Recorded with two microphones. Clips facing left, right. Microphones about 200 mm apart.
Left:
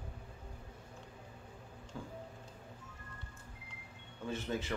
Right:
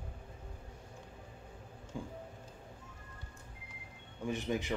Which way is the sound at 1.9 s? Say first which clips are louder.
Right 4 dB; 15° right (ahead or behind).